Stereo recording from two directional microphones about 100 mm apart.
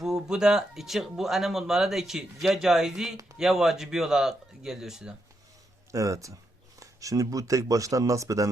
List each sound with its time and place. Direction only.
0.0 s speech: 5° right (ahead or behind)
5.9 s speech: 30° right (ahead or behind)